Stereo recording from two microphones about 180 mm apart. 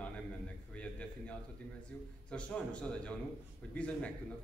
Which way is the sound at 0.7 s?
5° left (ahead or behind).